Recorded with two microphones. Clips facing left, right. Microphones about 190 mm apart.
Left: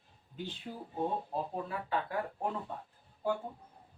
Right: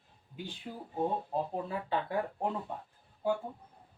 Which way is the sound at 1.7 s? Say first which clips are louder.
Right 2 dB; 20° right (ahead or behind).